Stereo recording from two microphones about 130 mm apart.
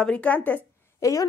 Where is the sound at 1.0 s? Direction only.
25° left (ahead or behind).